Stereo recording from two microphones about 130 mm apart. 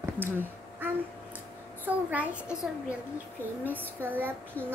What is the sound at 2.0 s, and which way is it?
Speech, 10° right (ahead or behind).